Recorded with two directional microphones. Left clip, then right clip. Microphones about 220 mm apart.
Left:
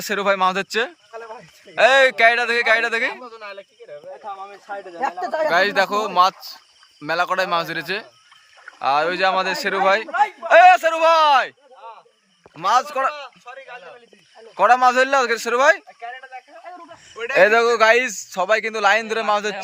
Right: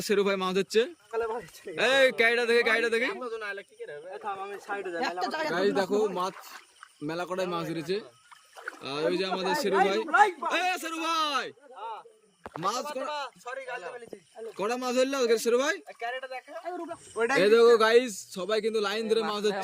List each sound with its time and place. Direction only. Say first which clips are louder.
0.0 s a man's voice: left 8 dB; 5° right (ahead or behind)
5.5 s speech: left 10 dB; 30° left (ahead or behind)
7.3 s a man's voice: left 11 dB; centre (ahead or behind)
10.1 s speech: left 2 dB; 25° right (ahead or behind)
10.5 s a man's voice: left 18 dB; 5° right (ahead or behind)
12.6 s a man's voice: left 13 dB; 5° right (ahead or behind)
13.2 s speech: even; 20° right (ahead or behind)
14.5 s a man's voice: left 15 dB; 5° right (ahead or behind)
16.0 s a sound: left 1 dB; 20° right (ahead or behind)
17.3 s a man's voice: left 6 dB; centre (ahead or behind)